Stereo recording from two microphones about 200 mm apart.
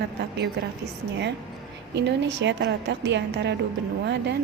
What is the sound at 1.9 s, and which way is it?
A woman's voice, 60° right (ahead or behind).